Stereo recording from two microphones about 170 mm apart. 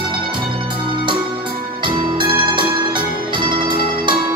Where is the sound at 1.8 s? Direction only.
30° right (ahead or behind).